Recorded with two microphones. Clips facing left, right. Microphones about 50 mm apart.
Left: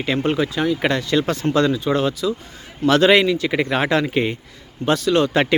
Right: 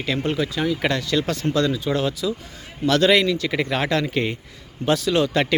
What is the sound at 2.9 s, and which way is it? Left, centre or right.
Speech, left.